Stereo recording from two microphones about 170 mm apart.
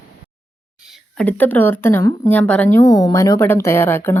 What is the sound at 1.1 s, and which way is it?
Speech, 10° left (ahead or behind).